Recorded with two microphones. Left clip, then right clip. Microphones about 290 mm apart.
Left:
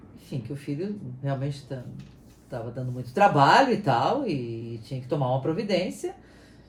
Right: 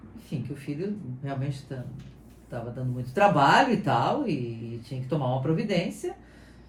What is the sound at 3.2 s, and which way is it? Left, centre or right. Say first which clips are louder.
Speech: left 2 dB; left.